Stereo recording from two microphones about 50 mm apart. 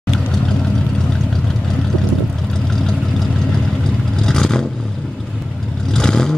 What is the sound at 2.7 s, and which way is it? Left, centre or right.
Vehicle, centre.